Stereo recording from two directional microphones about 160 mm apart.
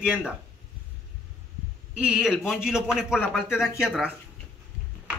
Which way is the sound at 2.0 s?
5° right (ahead or behind).